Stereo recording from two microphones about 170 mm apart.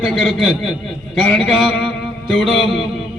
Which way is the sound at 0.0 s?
Centre (ahead or behind).